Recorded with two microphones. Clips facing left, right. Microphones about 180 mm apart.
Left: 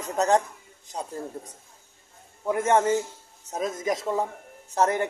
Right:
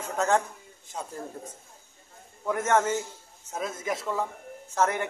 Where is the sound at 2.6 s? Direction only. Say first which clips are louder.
Left 3 dB; 30° left (ahead or behind).